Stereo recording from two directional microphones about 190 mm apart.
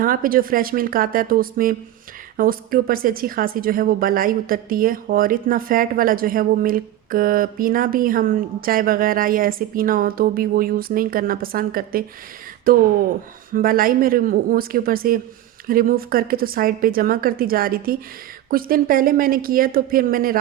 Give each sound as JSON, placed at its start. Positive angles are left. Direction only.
{"t": 0.0, "sound": "a woman's voice", "side_deg": -50}